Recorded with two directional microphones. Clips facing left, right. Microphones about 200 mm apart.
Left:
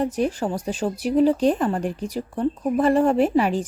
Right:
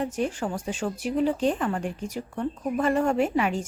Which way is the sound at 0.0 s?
35° left (ahead or behind).